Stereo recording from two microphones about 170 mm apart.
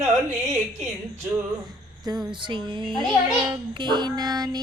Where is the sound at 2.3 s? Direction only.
30° right (ahead or behind).